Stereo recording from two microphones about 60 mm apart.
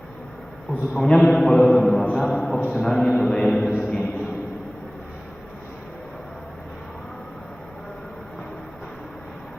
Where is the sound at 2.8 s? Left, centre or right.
Centre.